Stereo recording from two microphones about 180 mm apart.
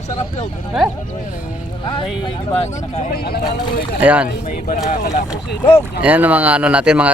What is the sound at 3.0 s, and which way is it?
Speech, 60° left (ahead or behind).